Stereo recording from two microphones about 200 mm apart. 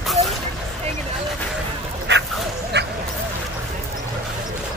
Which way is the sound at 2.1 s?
60° right (ahead or behind).